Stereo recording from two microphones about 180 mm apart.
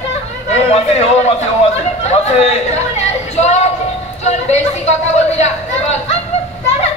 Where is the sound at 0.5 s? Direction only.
35° left (ahead or behind).